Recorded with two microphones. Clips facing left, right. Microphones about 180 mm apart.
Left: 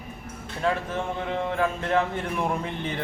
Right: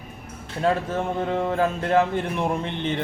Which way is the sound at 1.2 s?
35° right (ahead or behind).